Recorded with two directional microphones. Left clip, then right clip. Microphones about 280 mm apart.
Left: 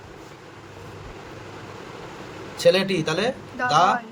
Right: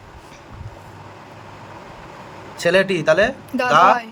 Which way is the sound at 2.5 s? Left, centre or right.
Centre.